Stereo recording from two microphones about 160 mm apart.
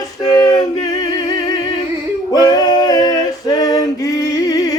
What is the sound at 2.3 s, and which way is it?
Male singing, 25° left (ahead or behind).